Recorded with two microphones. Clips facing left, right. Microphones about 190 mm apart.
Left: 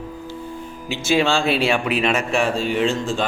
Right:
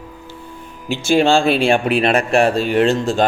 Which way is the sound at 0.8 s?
55° right (ahead or behind).